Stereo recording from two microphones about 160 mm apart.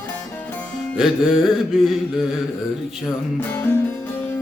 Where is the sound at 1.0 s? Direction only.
5° right (ahead or behind).